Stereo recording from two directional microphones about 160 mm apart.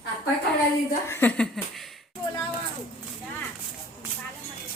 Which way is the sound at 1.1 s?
15° left (ahead or behind).